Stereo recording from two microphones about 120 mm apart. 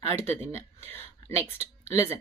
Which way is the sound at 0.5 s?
20° left (ahead or behind).